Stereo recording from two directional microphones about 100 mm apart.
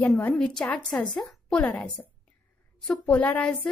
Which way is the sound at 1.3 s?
5° left (ahead or behind).